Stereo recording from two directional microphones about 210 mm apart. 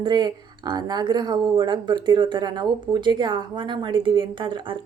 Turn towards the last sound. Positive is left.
turn(degrees=-20)  # may be behind; listen again after turning